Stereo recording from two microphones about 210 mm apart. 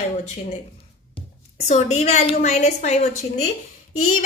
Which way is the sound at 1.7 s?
30° left (ahead or behind).